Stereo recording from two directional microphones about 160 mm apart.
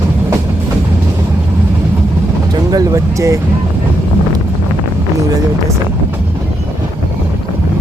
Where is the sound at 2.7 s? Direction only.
20° right (ahead or behind).